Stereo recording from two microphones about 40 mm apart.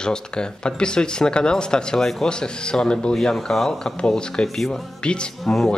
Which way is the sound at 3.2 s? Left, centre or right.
Centre.